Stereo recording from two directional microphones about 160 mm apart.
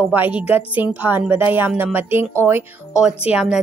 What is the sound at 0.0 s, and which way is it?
A woman's voice, 10° right (ahead or behind).